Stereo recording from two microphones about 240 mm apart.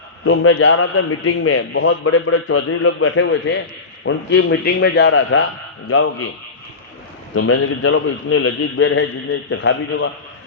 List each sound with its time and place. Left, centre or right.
0.3 s a man's voice: left
7.3 s a man's voice: left